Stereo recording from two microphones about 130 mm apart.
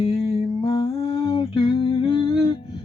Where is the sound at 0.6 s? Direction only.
45° left (ahead or behind).